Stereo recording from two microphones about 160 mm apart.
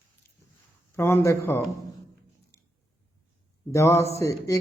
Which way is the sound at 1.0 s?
15° left (ahead or behind).